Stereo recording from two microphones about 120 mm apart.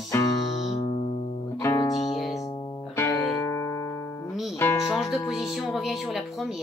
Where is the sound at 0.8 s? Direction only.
50° left (ahead or behind).